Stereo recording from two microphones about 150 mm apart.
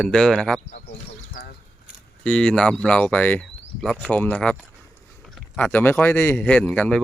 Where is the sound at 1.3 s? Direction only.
80° left.